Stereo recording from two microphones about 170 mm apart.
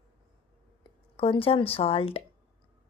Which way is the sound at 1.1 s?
35° left (ahead or behind).